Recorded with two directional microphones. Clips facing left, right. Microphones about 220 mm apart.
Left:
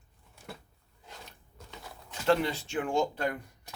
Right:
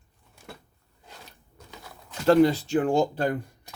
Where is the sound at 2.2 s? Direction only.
40° right (ahead or behind).